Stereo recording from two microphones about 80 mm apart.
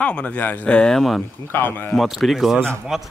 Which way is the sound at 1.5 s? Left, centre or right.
Left.